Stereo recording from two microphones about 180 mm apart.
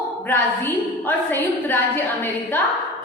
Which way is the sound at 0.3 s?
10° left (ahead or behind).